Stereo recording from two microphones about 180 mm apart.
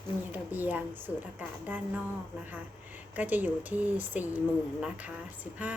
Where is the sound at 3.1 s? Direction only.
10° right (ahead or behind).